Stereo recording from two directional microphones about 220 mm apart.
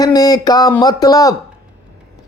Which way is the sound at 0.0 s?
15° left (ahead or behind).